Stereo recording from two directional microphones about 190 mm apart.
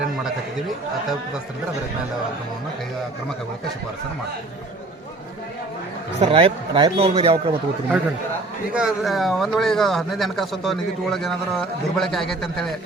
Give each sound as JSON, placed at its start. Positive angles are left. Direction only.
{"t": 6.1, "sound": "a man's voice", "side_deg": -30}
{"t": 8.7, "sound": "speech", "side_deg": 0}